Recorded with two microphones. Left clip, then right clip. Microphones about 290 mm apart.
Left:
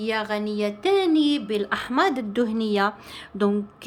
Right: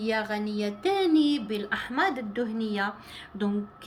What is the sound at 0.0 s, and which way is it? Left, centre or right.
A woman's voice, centre.